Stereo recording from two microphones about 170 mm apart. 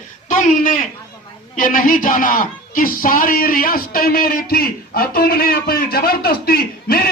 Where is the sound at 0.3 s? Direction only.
50° left (ahead or behind).